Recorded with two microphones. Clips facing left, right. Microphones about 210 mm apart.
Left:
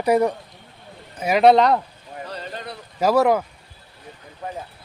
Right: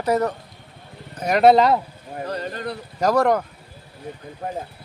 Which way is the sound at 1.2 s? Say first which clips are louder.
Even; centre (ahead or behind).